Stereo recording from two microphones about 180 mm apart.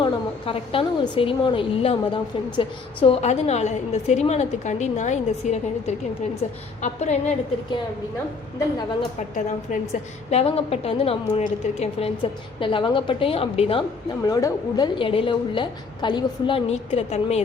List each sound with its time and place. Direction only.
0.0 s a woman's voice: 30° left (ahead or behind)
9.1 s a woman's voice: 40° left (ahead or behind)
14.3 s a woman's voice: 20° left (ahead or behind); by 17.4 s 35° left (ahead or behind)